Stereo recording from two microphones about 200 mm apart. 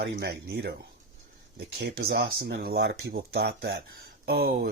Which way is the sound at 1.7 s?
50° right (ahead or behind).